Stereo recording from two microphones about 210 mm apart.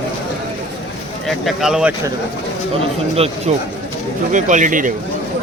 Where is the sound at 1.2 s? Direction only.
Centre (ahead or behind).